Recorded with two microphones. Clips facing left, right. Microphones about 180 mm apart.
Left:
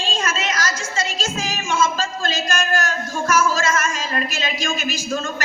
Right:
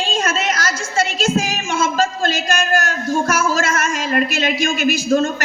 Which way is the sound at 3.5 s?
55° right (ahead or behind).